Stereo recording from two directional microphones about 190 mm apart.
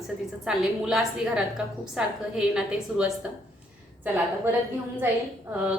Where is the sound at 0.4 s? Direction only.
Centre (ahead or behind).